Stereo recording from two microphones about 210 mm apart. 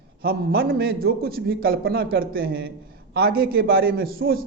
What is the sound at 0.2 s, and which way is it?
A man's voice, 45° right (ahead or behind).